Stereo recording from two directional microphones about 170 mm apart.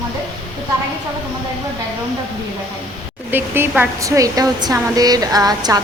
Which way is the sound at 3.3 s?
10° right (ahead or behind).